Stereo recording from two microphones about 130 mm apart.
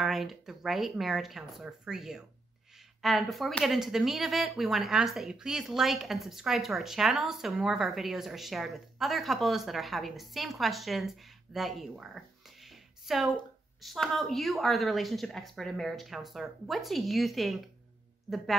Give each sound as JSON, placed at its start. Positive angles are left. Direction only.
{"t": 0.0, "sound": "speech", "side_deg": 0}
{"t": 12.6, "sound": "a sound", "side_deg": 0}
{"t": 13.7, "sound": "speech", "side_deg": 0}